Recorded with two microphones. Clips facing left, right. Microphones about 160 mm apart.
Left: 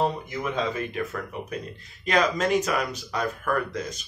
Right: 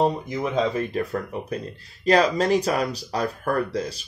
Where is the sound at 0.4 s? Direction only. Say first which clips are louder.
Right 4 dB; 30° right (ahead or behind).